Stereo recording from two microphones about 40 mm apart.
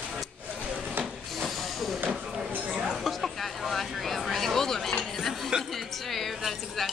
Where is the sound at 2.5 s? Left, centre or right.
Right.